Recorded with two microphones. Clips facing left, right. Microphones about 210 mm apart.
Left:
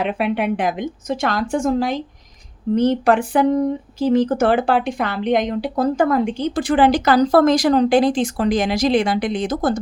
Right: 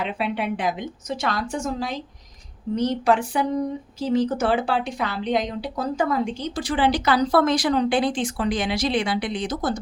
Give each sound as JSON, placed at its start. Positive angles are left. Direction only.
{"t": 0.0, "sound": "speech", "side_deg": 60}